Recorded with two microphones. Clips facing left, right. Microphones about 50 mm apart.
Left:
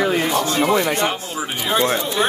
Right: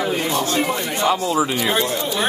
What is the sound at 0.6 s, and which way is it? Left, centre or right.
Speech, left.